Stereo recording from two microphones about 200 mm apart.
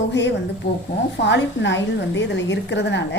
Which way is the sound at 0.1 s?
60° left (ahead or behind).